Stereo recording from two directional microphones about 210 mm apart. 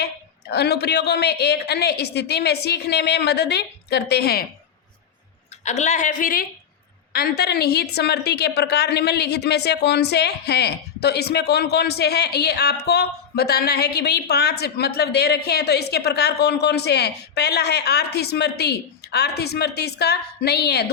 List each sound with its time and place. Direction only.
0.0 s a woman's voice: 50° left (ahead or behind)
5.6 s a woman's voice: 35° left (ahead or behind); by 20.9 s 50° left (ahead or behind)